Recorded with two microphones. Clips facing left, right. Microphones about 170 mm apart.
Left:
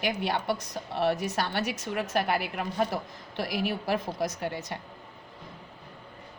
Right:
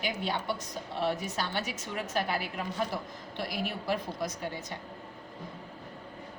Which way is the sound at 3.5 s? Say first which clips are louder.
Left 4 dB; 75° left (ahead or behind).